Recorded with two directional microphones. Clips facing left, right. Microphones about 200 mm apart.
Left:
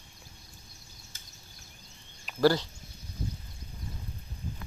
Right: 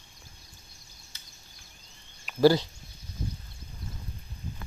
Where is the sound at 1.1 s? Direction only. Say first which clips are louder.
Left 1 dB; 50° left (ahead or behind).